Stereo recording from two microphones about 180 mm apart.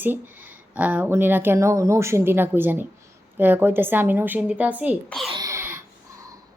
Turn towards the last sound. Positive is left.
turn(degrees=-15)  # may be behind; listen again after turning